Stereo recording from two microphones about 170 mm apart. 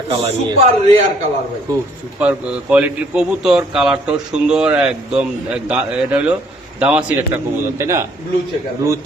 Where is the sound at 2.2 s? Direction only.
10° right (ahead or behind).